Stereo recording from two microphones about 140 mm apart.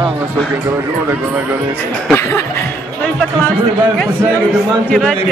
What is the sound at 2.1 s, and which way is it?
Speech, 15° left (ahead or behind).